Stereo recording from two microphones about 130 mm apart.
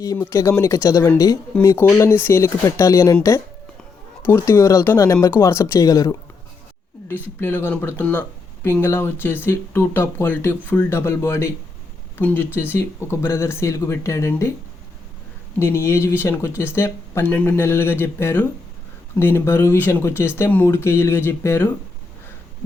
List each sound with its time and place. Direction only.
0.0 s speech: 25° left (ahead or behind)
4.2 s speech: 20° left (ahead or behind)
15.5 s speech: 20° left (ahead or behind)